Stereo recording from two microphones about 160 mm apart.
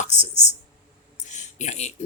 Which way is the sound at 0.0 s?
45° left (ahead or behind).